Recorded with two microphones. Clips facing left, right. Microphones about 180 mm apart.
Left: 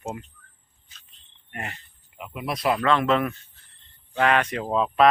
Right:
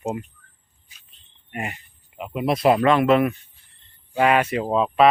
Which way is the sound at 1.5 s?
10° right (ahead or behind).